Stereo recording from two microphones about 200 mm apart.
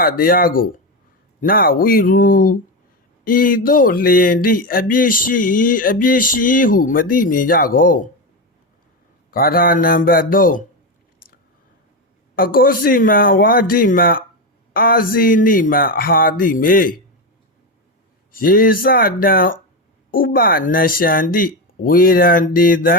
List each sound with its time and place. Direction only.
0.0 s speech: 45° left (ahead or behind)
9.3 s speech: 45° left (ahead or behind)
12.4 s speech: 45° left (ahead or behind)
18.3 s speech: 45° left (ahead or behind)